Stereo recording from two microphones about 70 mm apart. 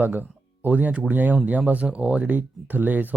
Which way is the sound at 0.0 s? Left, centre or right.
Right.